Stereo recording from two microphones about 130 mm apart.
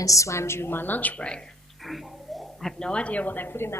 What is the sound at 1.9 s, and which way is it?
A woman's voice, centre (ahead or behind).